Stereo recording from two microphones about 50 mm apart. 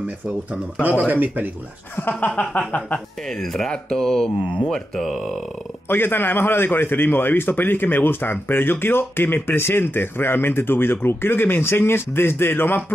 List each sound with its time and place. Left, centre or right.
0.8 s speech: right
2.0 s speech: left
3.3 s speech: centre
5.9 s a man's voice: left